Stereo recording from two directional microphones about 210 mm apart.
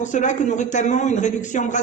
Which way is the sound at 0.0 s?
35° left (ahead or behind).